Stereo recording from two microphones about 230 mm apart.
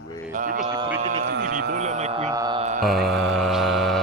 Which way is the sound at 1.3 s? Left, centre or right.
Right.